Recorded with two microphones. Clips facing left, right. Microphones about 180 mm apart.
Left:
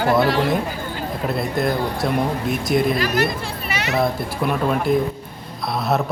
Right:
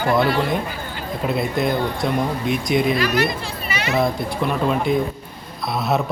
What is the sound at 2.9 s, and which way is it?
Speech, 45° left (ahead or behind).